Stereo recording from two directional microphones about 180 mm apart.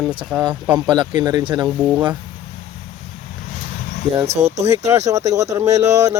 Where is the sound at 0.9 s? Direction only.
25° right (ahead or behind).